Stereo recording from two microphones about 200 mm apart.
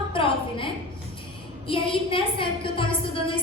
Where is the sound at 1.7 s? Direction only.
25° left (ahead or behind).